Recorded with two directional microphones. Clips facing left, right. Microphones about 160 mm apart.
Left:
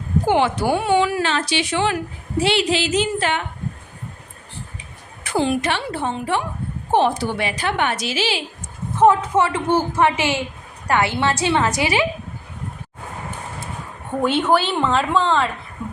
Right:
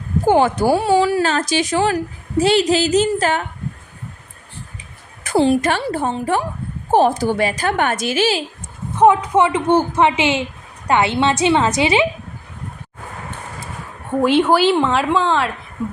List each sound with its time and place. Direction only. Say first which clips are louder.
0.3 s speech: right 5 dB; 45° right (ahead or behind)
5.2 s speech: right 5 dB; 35° right (ahead or behind)
9.0 s a woman's voice: right 2 dB; 15° right (ahead or behind)
14.2 s a woman's voice: right 4 dB; 5° right (ahead or behind)